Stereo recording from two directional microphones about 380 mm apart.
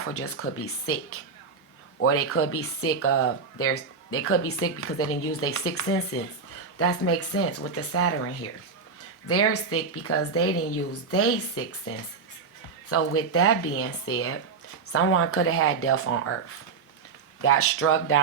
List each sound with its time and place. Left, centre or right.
0.0 s a woman's voice: left